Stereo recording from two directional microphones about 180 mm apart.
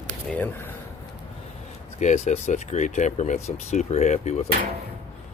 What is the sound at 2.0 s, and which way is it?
Speech, 40° left (ahead or behind).